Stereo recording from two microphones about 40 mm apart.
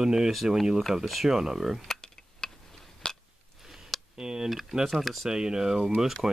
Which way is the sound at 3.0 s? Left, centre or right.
Centre.